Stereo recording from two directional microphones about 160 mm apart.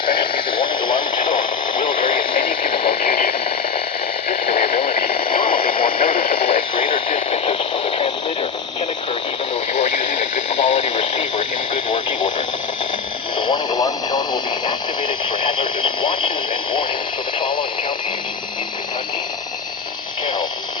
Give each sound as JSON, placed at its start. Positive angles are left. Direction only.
{"t": 0.0, "sound": "radio", "side_deg": 30}
{"t": 4.3, "sound": "radio", "side_deg": 40}
{"t": 10.6, "sound": "radio", "side_deg": 40}
{"t": 13.5, "sound": "radio", "side_deg": 25}